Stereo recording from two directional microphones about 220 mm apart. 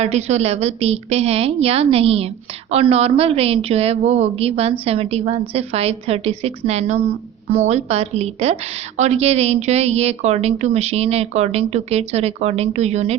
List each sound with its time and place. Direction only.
0.0 s a woman's voice: 30° right (ahead or behind)